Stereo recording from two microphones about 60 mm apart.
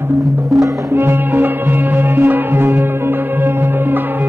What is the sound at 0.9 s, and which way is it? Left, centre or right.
Music, right.